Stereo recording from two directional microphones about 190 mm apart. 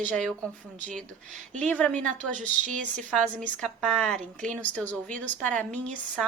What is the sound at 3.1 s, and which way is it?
A woman's voice, 5° left (ahead or behind).